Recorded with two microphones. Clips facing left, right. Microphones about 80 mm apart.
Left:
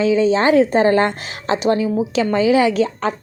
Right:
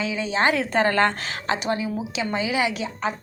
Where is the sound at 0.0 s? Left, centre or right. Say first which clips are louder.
Left 8 dB; left.